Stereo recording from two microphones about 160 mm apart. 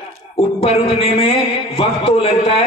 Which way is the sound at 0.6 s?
35° left (ahead or behind).